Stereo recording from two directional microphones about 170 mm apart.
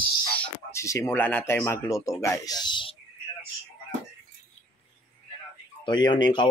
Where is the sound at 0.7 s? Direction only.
15° left (ahead or behind).